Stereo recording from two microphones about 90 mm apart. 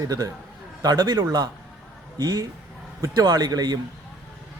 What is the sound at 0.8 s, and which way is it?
A man's voice, 50° right (ahead or behind).